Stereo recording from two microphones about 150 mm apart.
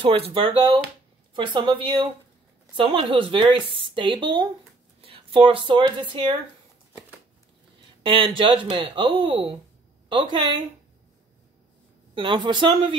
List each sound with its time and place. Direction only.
0.0 s speech: 40° right (ahead or behind)
8.0 s speech: 35° right (ahead or behind)
12.2 s speech: 35° right (ahead or behind)